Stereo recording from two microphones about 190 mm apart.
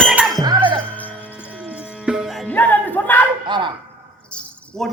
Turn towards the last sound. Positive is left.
turn(degrees=0)  # may be behind; listen again after turning